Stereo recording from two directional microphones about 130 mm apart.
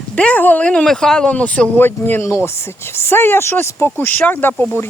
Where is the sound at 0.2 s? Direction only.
10° left (ahead or behind).